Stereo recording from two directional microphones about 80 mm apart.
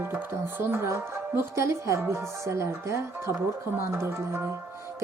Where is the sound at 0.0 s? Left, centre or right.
Right.